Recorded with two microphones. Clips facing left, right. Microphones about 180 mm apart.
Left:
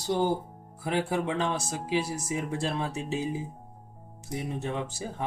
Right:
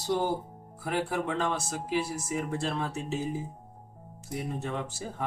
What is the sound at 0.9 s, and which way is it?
Speech, 15° left (ahead or behind).